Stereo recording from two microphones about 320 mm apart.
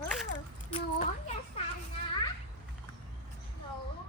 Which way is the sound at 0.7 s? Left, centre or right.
Centre.